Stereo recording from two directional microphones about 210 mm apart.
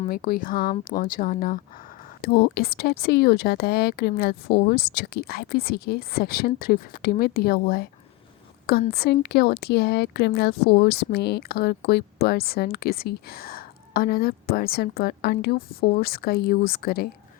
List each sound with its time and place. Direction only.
0.1 s speech: 45° left (ahead or behind)
8.9 s speech: 50° left (ahead or behind)